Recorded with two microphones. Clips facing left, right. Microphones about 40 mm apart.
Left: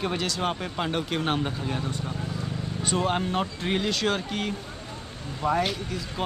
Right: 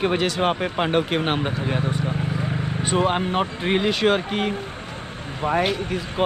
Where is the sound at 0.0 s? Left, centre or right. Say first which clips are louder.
Right 7 dB; right.